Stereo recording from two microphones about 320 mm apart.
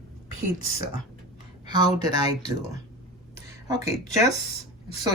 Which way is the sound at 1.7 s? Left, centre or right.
Centre.